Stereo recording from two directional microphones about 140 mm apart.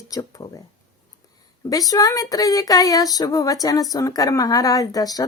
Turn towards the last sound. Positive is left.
turn(degrees=25)  # may be behind; listen again after turning